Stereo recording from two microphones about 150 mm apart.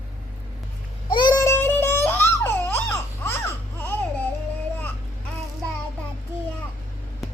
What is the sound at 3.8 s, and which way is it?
Baby cry, 15° left (ahead or behind).